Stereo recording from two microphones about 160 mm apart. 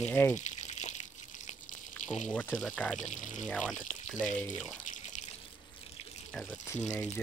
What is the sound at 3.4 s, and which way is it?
Speech, centre (ahead or behind).